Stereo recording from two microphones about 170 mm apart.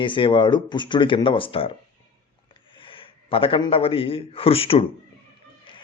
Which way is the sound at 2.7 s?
30° left (ahead or behind).